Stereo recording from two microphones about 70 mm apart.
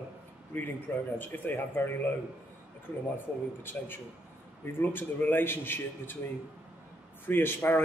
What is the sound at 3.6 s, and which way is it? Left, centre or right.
A man's voice, left.